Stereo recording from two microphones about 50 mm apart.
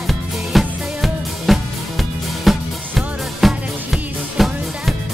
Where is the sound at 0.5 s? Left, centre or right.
Centre.